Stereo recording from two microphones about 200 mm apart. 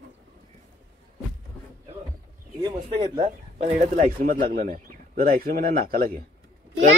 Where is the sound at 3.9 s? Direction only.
45° right (ahead or behind).